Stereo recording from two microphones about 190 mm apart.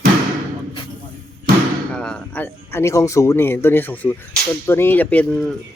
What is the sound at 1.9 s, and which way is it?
A man's voice, 5° left (ahead or behind).